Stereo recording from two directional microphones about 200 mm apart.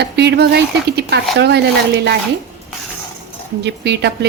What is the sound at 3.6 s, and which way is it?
Speech, 60° right (ahead or behind).